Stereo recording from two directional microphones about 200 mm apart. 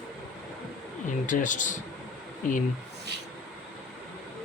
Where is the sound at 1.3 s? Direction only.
40° left (ahead or behind).